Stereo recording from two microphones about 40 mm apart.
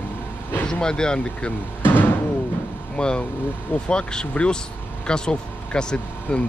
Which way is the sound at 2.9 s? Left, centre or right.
Left.